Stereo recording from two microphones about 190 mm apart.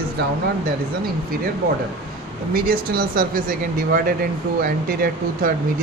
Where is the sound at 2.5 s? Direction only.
50° right (ahead or behind).